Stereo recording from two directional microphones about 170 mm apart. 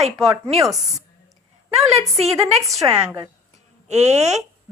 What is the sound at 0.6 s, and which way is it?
Speech, centre (ahead or behind).